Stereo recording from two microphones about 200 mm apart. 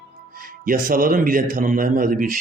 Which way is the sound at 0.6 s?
45° right (ahead or behind).